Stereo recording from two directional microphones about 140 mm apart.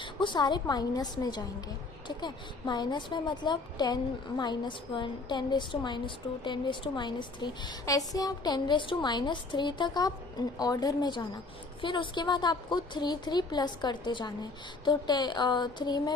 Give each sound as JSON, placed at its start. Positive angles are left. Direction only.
{"t": 0.0, "sound": "a woman's voice", "side_deg": 35}